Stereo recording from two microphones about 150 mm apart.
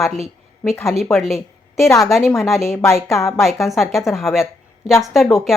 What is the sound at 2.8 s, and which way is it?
Speech, 20° left (ahead or behind).